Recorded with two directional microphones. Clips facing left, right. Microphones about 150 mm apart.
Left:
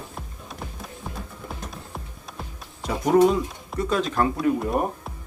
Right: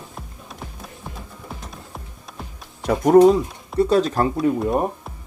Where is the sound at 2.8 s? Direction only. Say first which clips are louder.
Right 6 dB; 50° right (ahead or behind).